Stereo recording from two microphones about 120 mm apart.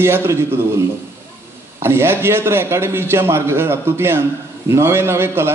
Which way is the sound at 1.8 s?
20° right (ahead or behind).